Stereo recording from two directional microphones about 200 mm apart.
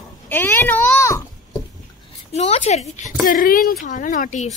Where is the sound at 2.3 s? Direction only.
35° left (ahead or behind).